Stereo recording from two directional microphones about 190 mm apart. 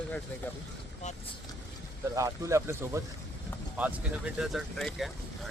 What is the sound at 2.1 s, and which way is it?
Speech, 15° right (ahead or behind).